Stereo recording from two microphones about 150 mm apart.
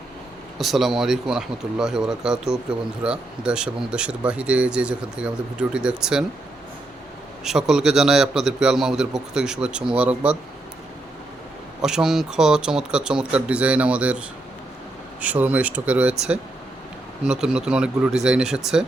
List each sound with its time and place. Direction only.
0.6 s speech: centre (ahead or behind)
7.4 s speech: 5° right (ahead or behind)
11.8 s speech: 5° right (ahead or behind)
15.2 s speech: 10° right (ahead or behind)